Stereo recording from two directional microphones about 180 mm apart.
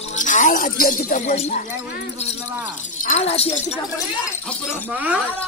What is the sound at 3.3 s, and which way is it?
Speech, 35° left (ahead or behind).